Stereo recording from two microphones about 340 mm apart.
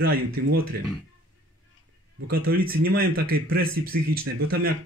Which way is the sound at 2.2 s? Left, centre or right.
Right.